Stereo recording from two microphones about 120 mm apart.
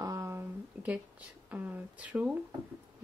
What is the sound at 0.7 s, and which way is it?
Speech, 15° right (ahead or behind).